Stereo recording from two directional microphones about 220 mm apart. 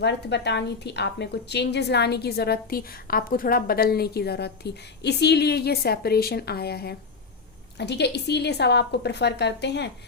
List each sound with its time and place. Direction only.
0.0 s a woman's voice: 50° left (ahead or behind)